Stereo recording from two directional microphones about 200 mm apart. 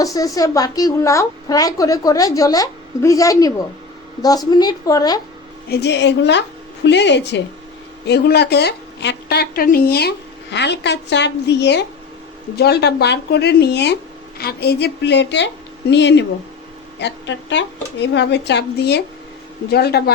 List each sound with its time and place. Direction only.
0.0 s a woman's voice: 15° left (ahead or behind)
5.6 s a woman's voice: 55° left (ahead or behind)